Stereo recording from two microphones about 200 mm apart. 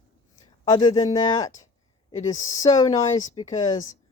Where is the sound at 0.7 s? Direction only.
20° left (ahead or behind).